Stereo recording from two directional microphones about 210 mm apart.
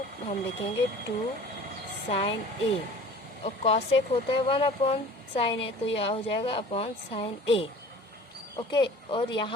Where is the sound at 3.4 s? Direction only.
30° left (ahead or behind).